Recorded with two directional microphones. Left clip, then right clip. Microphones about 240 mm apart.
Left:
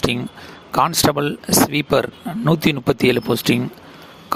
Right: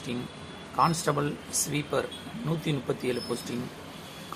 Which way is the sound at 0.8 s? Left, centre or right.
Left.